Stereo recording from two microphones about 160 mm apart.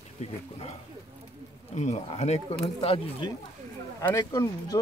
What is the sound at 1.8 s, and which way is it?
Speech, 45° left (ahead or behind).